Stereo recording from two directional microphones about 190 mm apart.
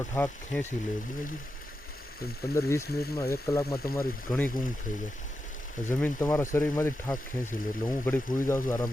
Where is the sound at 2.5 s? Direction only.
15° left (ahead or behind).